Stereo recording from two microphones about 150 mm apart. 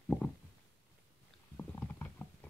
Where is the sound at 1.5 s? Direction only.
10° left (ahead or behind).